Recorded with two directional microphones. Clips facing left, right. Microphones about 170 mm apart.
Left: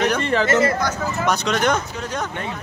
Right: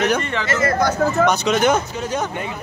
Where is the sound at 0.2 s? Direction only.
35° left (ahead or behind).